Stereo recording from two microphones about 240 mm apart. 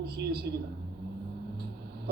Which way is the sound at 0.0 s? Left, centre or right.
Right.